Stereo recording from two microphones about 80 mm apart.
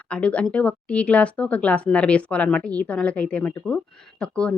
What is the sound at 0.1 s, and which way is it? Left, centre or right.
Speech, centre.